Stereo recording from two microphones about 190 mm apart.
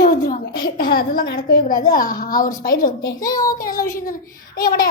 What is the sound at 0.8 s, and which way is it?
A woman's voice, 50° left (ahead or behind).